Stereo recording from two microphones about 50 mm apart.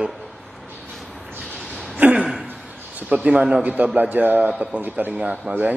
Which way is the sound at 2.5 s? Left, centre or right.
Right.